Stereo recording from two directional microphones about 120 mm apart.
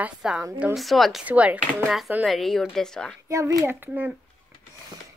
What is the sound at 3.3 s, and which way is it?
Speech, 25° right (ahead or behind).